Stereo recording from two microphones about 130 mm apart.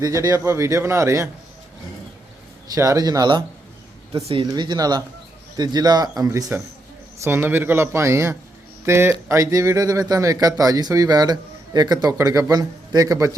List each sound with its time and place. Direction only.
0.0 s speech: 25° right (ahead or behind)
2.7 s speech: 25° right (ahead or behind)
4.2 s speech: 50° right (ahead or behind)
4.5 s speech: 35° right (ahead or behind)
6.2 s speech: 20° right (ahead or behind)